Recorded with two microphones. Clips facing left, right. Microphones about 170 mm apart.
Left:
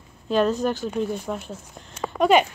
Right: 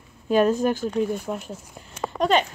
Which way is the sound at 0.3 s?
10° right (ahead or behind).